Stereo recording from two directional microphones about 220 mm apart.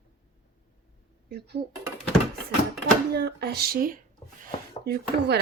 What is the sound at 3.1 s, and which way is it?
Speech, 50° right (ahead or behind).